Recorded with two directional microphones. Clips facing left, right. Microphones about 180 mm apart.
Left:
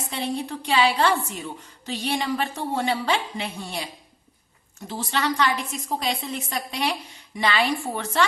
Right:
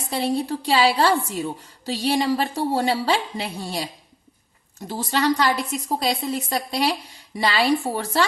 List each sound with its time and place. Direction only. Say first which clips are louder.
0.1 s a woman's voice: right 6 dB; 35° right (ahead or behind)
5.1 s a woman's voice: right 4 dB; 35° right (ahead or behind)